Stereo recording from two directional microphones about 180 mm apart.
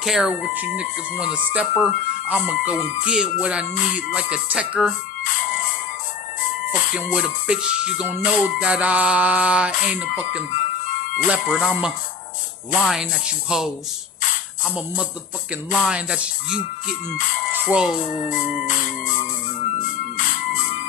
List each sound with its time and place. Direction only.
0.0 s music: 5° right (ahead or behind)
3.1 s speech: 5° right (ahead or behind)
4.1 s music: 5° right (ahead or behind)
5.2 s music: 50° left (ahead or behind)
6.7 s a sound: 45° left (ahead or behind)
7.0 s music: 5° right (ahead or behind)
10.5 s music: 45° left (ahead or behind)
11.2 s speech: 5° right (ahead or behind)
15.7 s speech: 5° right (ahead or behind)
17.6 s speech: 5° right (ahead or behind)
18.3 s music: 45° left (ahead or behind)